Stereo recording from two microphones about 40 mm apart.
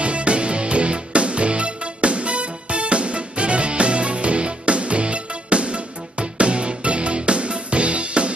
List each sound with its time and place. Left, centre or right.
0.0 s music: right